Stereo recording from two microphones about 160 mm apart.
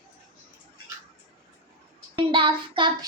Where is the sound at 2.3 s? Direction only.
30° right (ahead or behind).